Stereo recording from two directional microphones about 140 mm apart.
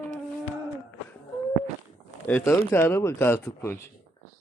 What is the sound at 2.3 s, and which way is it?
Speech, 15° left (ahead or behind).